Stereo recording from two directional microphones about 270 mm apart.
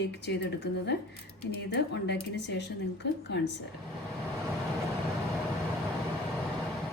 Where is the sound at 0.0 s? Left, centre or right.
Left.